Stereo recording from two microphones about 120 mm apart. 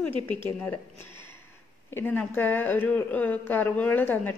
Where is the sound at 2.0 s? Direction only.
15° left (ahead or behind).